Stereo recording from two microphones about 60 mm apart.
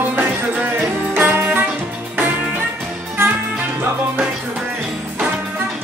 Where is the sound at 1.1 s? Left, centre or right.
Right.